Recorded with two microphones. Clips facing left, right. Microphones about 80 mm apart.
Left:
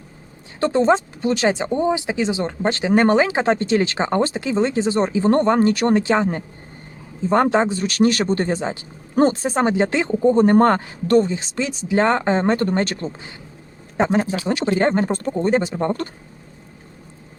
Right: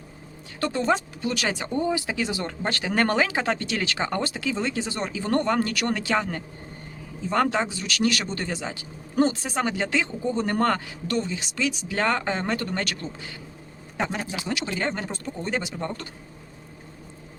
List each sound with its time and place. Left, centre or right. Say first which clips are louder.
0.6 s speech: left 7 dB; left